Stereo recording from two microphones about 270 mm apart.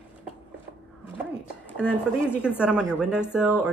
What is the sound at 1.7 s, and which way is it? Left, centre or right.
A woman's voice, centre.